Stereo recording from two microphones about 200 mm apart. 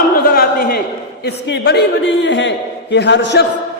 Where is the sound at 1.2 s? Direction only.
60° left (ahead or behind).